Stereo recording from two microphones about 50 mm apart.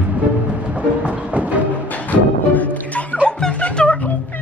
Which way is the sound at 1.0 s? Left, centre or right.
Right.